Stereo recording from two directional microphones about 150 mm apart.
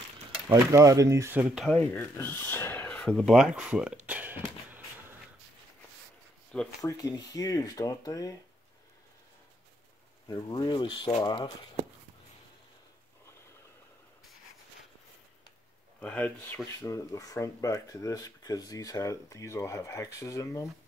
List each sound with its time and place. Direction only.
0.5 s speech: 20° right (ahead or behind); by 1.7 s 5° right (ahead or behind)
1.7 s speech: 10° left (ahead or behind); by 4.8 s 10° right (ahead or behind)
6.8 s speech: 25° left (ahead or behind)
10.2 s speech: 25° left (ahead or behind)
16.0 s speech: 10° left (ahead or behind)
16.8 s speech: 20° left (ahead or behind)